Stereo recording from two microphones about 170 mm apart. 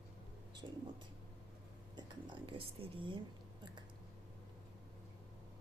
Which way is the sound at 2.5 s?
30° right (ahead or behind).